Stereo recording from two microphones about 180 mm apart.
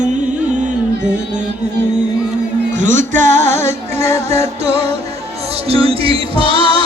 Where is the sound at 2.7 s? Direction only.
45° right (ahead or behind).